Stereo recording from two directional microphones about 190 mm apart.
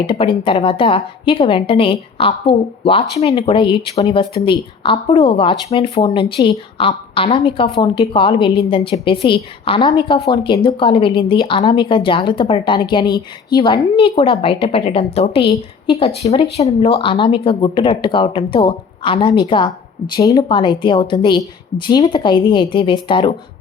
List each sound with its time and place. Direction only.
0.0 s speech: 25° left (ahead or behind)